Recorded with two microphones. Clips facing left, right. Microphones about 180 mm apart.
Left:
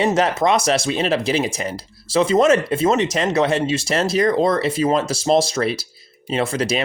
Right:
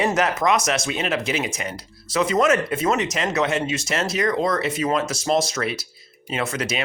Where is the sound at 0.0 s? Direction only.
30° left (ahead or behind).